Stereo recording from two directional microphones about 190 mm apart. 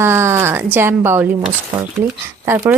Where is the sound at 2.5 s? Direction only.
10° right (ahead or behind).